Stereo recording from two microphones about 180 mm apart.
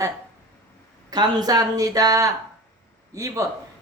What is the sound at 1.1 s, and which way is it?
A man's voice, 20° right (ahead or behind).